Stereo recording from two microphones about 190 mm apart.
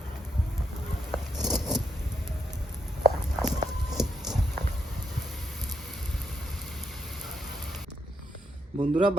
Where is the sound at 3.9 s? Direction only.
Centre (ahead or behind).